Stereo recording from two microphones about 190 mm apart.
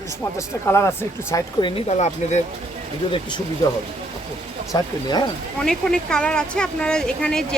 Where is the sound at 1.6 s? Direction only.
35° left (ahead or behind).